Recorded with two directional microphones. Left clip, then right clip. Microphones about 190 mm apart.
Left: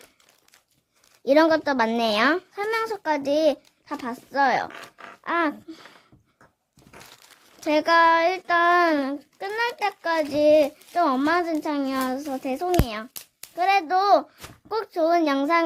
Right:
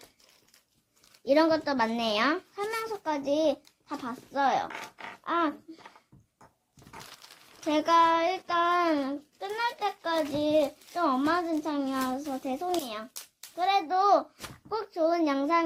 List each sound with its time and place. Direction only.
1.2 s child singing: 35° left (ahead or behind)
5.2 s a sound: 45° left (ahead or behind)
7.6 s child singing: 40° left (ahead or behind)